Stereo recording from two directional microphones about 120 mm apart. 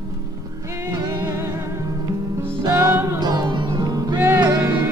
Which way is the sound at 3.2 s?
35° right (ahead or behind).